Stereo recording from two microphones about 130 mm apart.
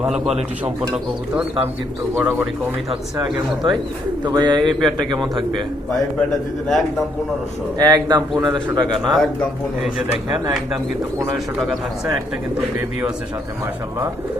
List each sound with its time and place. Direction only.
0.0 s a man's voice: 5° right (ahead or behind)
2.1 s speech: 20° right (ahead or behind)
3.2 s a man's voice: 35° right (ahead or behind)
4.7 s a man's voice: centre (ahead or behind)
7.8 s a man's voice: 30° right (ahead or behind)
9.1 s a man's voice: 5° left (ahead or behind)